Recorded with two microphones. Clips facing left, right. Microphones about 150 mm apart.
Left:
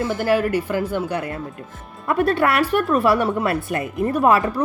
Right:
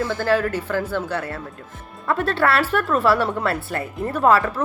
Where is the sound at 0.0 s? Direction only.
15° left (ahead or behind).